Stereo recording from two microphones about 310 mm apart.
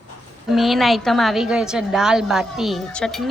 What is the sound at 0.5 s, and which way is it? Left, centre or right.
A woman's voice, centre.